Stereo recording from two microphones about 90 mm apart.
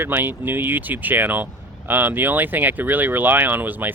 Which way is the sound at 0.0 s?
25° right (ahead or behind).